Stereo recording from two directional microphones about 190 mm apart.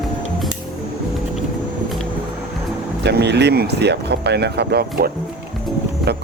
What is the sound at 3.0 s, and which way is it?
Speech, 60° right (ahead or behind).